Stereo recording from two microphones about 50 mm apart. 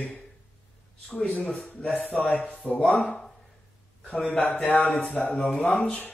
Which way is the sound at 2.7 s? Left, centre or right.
Left.